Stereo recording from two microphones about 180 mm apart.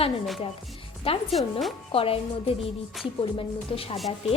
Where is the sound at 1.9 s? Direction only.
30° left (ahead or behind).